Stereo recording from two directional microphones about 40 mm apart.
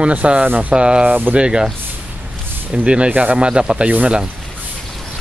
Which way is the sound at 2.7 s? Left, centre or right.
Right.